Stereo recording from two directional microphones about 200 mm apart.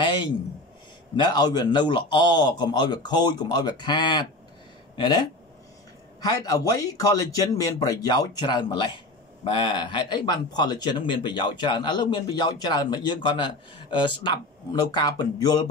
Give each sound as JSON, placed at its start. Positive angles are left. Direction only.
{"t": 1.1, "sound": "speech", "side_deg": 20}
{"t": 6.2, "sound": "speech", "side_deg": 20}